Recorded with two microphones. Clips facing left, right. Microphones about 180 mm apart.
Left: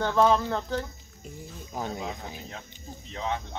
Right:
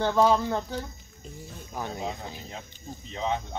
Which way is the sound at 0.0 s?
5° right (ahead or behind).